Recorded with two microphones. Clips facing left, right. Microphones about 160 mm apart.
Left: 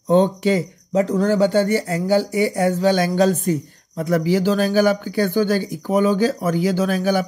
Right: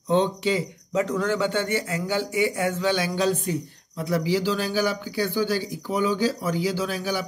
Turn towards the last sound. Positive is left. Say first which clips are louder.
# left 8 dB
turn(degrees=50)  # may be behind; listen again after turning